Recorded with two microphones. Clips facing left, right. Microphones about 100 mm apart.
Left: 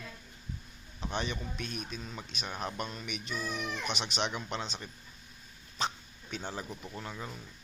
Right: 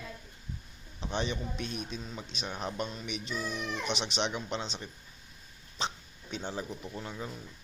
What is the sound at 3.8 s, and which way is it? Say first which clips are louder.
A man's voice: right 3 dB; 25° right (ahead or behind).